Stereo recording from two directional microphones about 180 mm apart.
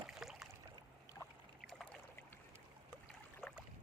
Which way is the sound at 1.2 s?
20° left (ahead or behind).